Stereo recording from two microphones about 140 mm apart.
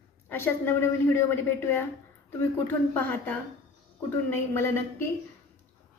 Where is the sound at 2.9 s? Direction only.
10° left (ahead or behind).